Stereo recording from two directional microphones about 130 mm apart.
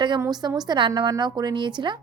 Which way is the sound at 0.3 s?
30° right (ahead or behind).